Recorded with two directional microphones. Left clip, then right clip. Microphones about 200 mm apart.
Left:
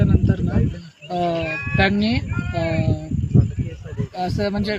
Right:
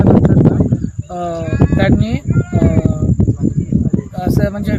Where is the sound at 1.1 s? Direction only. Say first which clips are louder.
Right 1 dB; 5° right (ahead or behind).